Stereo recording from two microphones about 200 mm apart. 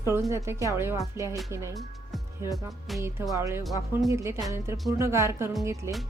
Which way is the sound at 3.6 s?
Centre (ahead or behind).